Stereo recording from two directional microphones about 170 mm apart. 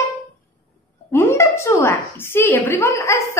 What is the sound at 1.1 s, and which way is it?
A woman's voice, 15° left (ahead or behind).